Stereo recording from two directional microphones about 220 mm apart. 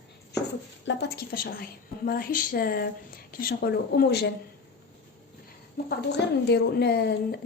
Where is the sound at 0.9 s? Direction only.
50° left (ahead or behind).